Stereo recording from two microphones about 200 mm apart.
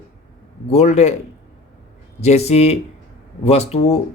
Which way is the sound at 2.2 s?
35° left (ahead or behind).